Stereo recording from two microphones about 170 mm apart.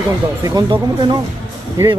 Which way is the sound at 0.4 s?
25° right (ahead or behind).